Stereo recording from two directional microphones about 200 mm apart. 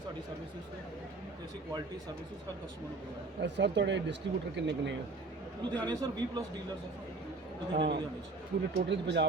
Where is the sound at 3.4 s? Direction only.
60° right (ahead or behind).